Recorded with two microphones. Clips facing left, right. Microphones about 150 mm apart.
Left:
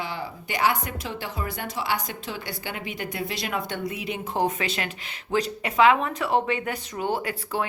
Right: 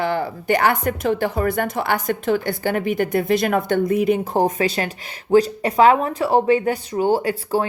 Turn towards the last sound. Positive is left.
turn(degrees=-35)  # may be behind; listen again after turning